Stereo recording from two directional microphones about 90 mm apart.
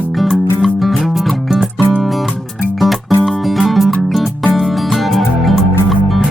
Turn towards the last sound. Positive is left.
turn(degrees=0)  # may be behind; listen again after turning